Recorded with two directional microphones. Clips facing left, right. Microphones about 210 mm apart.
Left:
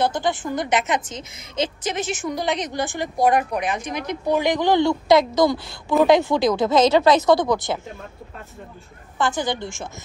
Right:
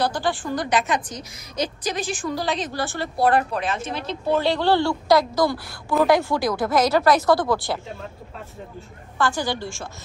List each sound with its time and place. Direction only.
0.0 s a woman's voice: 20° left (ahead or behind)
9.2 s a woman's voice: 20° left (ahead or behind)